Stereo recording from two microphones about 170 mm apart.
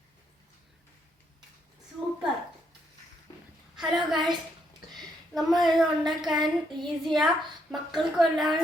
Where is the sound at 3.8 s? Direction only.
Centre (ahead or behind).